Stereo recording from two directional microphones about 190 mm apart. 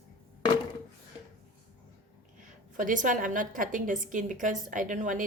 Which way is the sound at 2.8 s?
45° right (ahead or behind).